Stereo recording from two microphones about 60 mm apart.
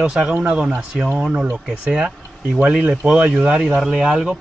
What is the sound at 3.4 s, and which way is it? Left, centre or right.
Speech, centre.